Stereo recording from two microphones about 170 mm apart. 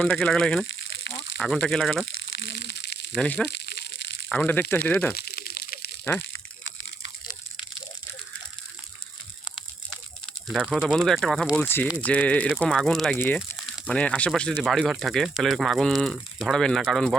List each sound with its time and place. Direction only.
0.0 s speech: 5° left (ahead or behind)
0.7 s a sound: 90° left
1.4 s speech: 5° left (ahead or behind)
2.5 s a sound: 85° left
3.2 s speech: 5° left (ahead or behind)
5.2 s a sound: 65° left (ahead or behind)
10.5 s speech: 5° right (ahead or behind)
11.5 s speech: 10° left (ahead or behind)
13.1 s speech: 10° left (ahead or behind)